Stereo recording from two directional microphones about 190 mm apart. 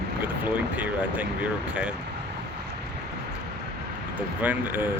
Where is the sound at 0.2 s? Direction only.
10° right (ahead or behind).